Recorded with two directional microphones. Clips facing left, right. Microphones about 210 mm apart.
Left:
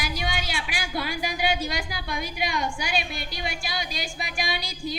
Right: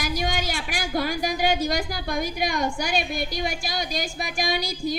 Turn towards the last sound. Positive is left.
turn(degrees=-45)  # may be behind; listen again after turning